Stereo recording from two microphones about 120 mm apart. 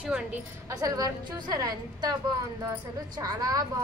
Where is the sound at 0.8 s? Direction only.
30° right (ahead or behind).